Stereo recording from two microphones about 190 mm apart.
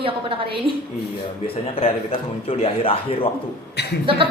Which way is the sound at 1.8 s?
30° left (ahead or behind).